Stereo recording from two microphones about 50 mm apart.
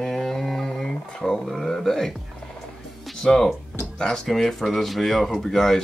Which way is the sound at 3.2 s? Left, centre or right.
Centre.